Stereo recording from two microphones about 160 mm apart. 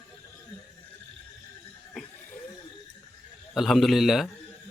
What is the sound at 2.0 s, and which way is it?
Chuckle, centre (ahead or behind).